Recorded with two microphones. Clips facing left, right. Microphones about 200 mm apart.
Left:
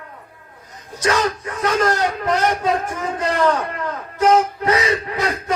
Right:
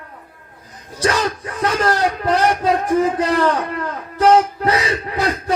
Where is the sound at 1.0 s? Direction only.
35° right (ahead or behind).